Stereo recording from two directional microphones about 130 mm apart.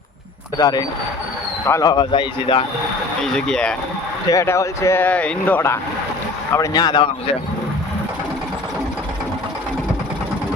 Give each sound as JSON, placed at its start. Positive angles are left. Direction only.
{"t": 0.6, "sound": "speech", "side_deg": 30}
{"t": 1.9, "sound": "speech", "side_deg": 40}
{"t": 3.2, "sound": "speech", "side_deg": 5}
{"t": 4.3, "sound": "speech", "side_deg": 25}
{"t": 6.7, "sound": "speech", "side_deg": 35}